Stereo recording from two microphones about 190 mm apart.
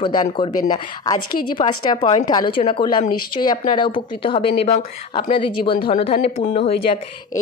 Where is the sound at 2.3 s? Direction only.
25° left (ahead or behind).